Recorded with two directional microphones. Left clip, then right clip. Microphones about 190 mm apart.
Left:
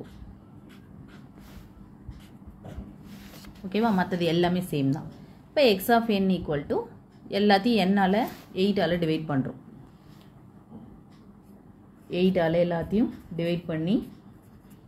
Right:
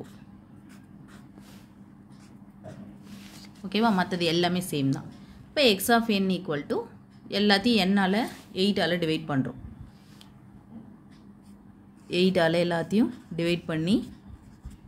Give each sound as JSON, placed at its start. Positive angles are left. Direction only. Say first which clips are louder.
{"t": 3.6, "sound": "a woman's voice", "louder": "right 1 dB", "side_deg": -15}
{"t": 12.1, "sound": "a woman's voice", "louder": "right 1 dB", "side_deg": -35}